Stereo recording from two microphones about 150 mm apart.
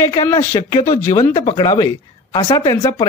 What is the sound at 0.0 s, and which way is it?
Speech, 20° left (ahead or behind).